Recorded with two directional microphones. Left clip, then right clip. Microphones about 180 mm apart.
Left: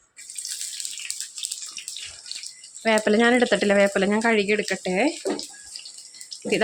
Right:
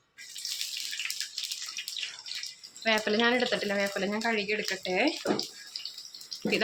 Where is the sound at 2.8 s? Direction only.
40° left (ahead or behind).